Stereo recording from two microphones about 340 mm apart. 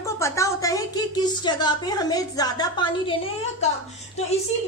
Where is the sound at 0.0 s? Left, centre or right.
Centre.